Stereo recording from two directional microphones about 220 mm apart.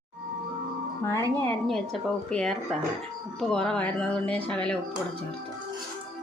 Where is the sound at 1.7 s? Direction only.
5° left (ahead or behind).